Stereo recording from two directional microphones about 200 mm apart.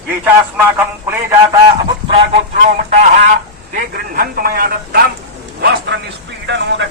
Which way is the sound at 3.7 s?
45° right (ahead or behind).